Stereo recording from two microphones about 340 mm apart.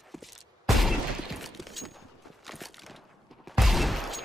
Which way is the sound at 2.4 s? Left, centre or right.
Centre.